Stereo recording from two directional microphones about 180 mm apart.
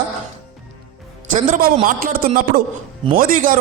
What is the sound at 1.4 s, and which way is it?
A man's voice, 50° right (ahead or behind).